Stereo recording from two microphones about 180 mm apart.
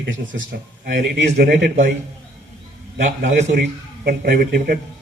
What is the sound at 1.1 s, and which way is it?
Speech, 70° right (ahead or behind).